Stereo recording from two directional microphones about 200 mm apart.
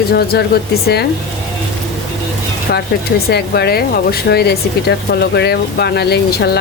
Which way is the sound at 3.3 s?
55° left (ahead or behind).